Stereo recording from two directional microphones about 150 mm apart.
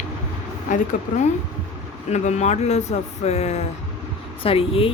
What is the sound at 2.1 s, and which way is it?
Speech, 50° left (ahead or behind).